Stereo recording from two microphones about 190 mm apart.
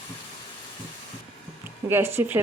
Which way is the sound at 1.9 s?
10° right (ahead or behind).